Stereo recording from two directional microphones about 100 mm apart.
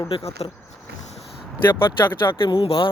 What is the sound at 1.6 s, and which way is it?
Speech, 20° left (ahead or behind).